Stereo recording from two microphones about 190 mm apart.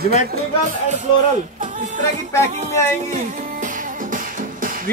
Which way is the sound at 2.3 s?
15° left (ahead or behind).